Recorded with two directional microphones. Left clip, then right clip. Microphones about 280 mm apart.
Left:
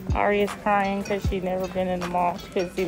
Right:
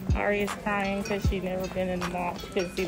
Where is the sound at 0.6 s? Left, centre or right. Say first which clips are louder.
Left 6 dB; left.